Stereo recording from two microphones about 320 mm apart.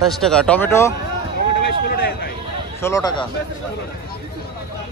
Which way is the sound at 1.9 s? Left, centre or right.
Left.